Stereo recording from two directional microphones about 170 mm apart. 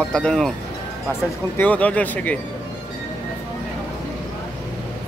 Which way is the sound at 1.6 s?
10° left (ahead or behind).